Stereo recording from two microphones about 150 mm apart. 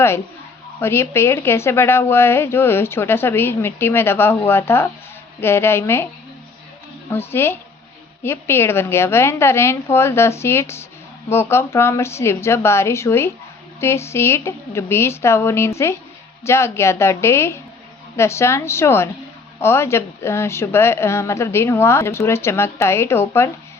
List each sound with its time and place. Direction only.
0.8 s a woman's voice: 15° left (ahead or behind)
7.1 s a woman's voice: 15° left (ahead or behind)